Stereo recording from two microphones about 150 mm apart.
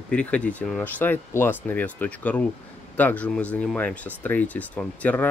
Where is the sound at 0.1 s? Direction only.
10° left (ahead or behind).